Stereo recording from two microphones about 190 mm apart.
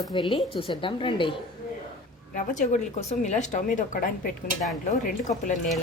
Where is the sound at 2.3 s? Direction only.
40° left (ahead or behind).